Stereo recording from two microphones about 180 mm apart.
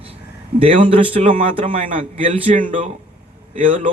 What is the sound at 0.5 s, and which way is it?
A man's voice, 30° right (ahead or behind).